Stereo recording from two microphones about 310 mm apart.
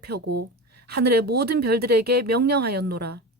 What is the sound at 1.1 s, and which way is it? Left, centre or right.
Speech, right.